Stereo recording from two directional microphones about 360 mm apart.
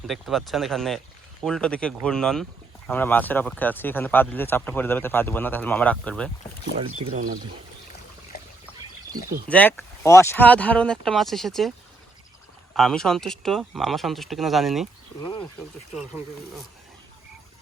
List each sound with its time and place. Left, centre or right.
0.1 s speech: centre
6.7 s speech: centre
8.3 s trickle: left
9.5 s speech: centre
12.7 s speech: centre
15.2 s speech: centre